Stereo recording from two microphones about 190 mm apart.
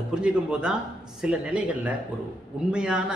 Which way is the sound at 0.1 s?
5° right (ahead or behind).